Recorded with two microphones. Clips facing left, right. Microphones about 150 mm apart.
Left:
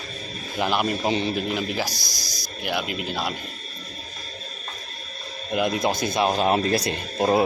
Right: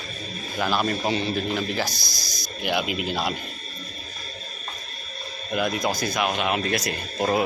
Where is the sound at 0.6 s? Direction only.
15° left (ahead or behind).